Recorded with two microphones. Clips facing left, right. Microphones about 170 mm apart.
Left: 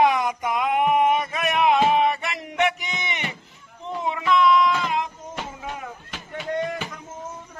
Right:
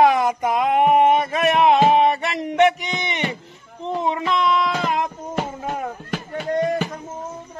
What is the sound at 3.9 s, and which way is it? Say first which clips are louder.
Music: right 2 dB; 35° right (ahead or behind).